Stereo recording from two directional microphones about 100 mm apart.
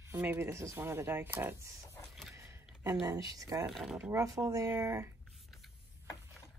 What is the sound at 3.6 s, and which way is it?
Speech, centre (ahead or behind).